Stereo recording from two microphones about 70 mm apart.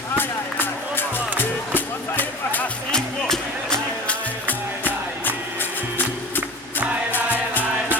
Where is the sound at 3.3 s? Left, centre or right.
Centre.